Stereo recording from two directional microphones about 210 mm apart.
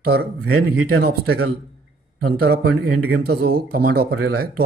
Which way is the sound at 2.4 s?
50° right (ahead or behind).